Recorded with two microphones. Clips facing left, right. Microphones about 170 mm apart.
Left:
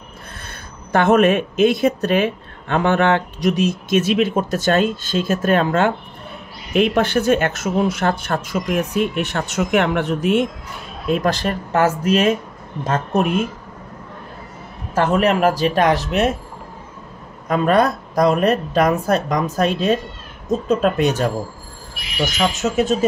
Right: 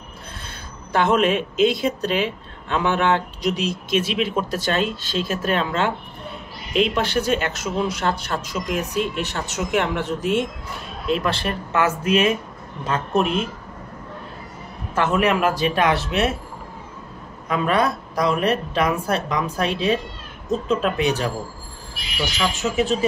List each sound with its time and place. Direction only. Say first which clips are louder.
0.9 s speech: left 4 dB; 50° left (ahead or behind)
11.1 s speech: left 3 dB; 40° left (ahead or behind)
15.0 s speech: left 3 dB; 40° left (ahead or behind)
17.5 s speech: left 4 dB; 45° left (ahead or behind)